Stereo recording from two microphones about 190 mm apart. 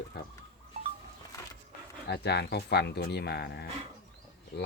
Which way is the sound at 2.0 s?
60° left (ahead or behind).